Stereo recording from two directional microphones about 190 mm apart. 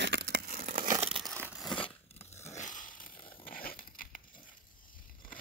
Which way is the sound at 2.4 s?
35° left (ahead or behind).